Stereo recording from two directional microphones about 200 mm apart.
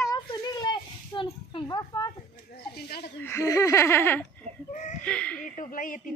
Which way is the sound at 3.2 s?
15° left (ahead or behind).